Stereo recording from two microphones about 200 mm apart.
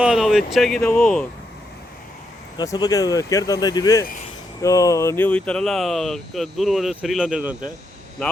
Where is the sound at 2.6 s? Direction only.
20° left (ahead or behind).